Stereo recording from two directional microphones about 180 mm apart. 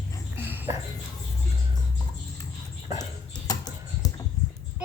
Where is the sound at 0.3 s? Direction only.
10° right (ahead or behind).